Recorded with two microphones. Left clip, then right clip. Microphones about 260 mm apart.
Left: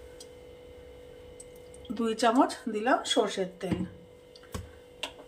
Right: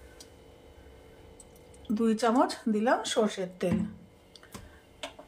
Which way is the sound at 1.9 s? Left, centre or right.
Right.